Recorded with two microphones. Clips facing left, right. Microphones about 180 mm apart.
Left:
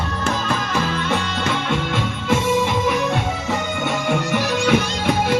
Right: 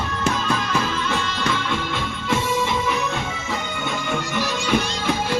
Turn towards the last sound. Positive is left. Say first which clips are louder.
# left 5 dB
turn(degrees=65)  # may be behind; listen again after turning